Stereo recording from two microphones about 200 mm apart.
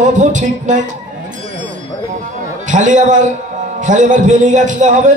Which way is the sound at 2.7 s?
40° right (ahead or behind).